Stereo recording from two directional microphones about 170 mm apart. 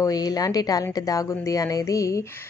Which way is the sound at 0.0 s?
20° left (ahead or behind).